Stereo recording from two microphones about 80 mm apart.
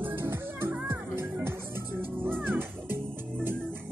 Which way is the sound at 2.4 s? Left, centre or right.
Right.